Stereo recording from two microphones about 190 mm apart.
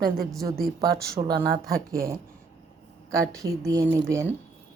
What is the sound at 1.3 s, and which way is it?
Speech, 50° right (ahead or behind).